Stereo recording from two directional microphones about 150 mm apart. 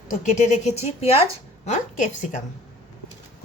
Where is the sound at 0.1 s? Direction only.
60° left (ahead or behind).